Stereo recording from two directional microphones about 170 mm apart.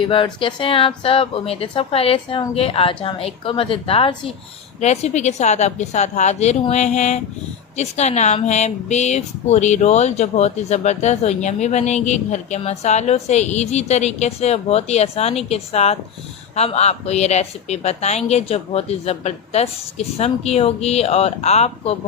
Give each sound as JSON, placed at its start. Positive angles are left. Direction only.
{"t": 0.0, "sound": "speech", "side_deg": 30}